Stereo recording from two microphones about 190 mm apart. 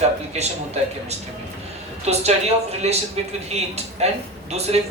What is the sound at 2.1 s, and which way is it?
A man's voice, 35° right (ahead or behind).